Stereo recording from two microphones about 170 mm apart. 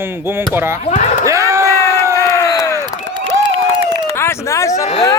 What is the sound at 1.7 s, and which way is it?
Crowd, 15° left (ahead or behind).